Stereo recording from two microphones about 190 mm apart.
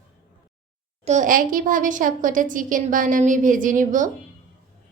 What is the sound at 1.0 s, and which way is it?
A woman's voice, 40° right (ahead or behind).